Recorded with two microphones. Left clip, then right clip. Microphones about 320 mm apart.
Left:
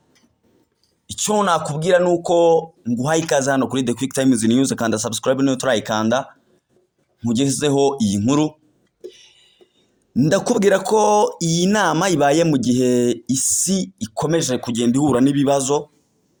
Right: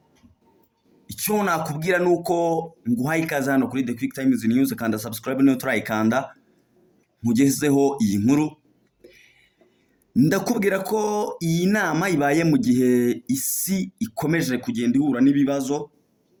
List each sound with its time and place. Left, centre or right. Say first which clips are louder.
1.0 s speech: left 5 dB; centre
9.0 s a sound: left 11 dB; left
10.1 s speech: left 4 dB; centre